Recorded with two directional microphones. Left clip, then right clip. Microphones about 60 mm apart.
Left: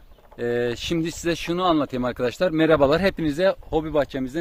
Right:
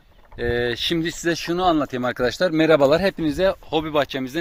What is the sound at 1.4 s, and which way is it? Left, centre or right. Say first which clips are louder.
Speech: right 1 dB; centre.